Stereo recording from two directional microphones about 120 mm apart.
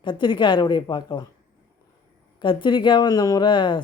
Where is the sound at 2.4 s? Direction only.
40° left (ahead or behind).